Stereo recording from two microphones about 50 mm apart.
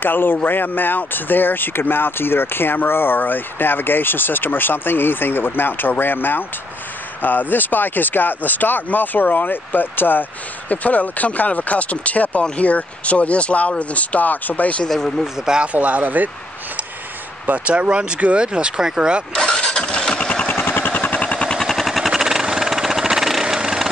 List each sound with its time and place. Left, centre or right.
0.0 s speech: left
10.7 s speech: left
14.9 s speech: centre
15.4 s speech: centre
15.7 s speech: right
17.5 s speech: right
19.3 s engine starting: centre
20.5 s a sound: left
21.5 s a sound: centre
22.1 s vehicle: centre